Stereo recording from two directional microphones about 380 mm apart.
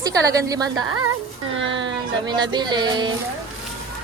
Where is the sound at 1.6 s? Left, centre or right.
Right.